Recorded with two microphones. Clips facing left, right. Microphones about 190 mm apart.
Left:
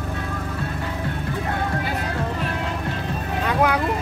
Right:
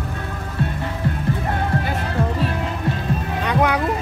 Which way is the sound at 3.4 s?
5° left (ahead or behind).